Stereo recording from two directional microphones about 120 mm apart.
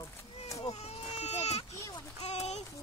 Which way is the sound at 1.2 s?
65° left (ahead or behind).